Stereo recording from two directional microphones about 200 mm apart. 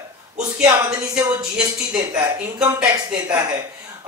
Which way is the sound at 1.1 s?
15° right (ahead or behind).